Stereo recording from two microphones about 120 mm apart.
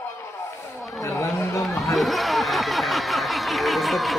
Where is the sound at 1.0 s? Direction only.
25° left (ahead or behind).